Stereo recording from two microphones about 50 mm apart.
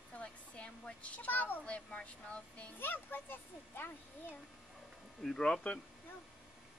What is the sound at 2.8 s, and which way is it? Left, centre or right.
Speech, left.